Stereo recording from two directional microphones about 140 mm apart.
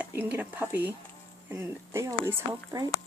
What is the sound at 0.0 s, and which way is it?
Speech, 15° right (ahead or behind).